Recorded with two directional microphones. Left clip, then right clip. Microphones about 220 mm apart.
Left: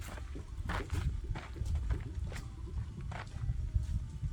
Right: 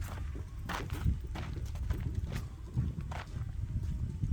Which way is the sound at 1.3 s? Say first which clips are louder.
Right 1 dB; 50° right (ahead or behind).